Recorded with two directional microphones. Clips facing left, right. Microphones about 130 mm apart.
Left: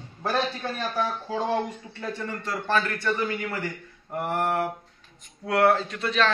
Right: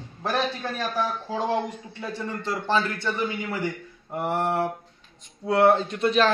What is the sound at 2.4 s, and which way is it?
A man's voice, 20° right (ahead or behind).